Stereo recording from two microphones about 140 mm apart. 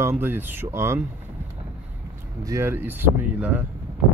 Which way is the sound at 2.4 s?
20° right (ahead or behind).